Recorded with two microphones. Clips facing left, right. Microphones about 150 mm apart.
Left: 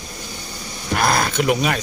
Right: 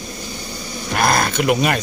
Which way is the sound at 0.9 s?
Centre (ahead or behind).